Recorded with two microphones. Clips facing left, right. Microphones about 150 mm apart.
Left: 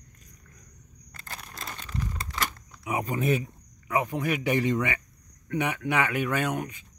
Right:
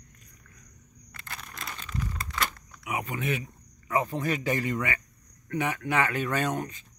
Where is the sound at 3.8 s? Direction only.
10° left (ahead or behind).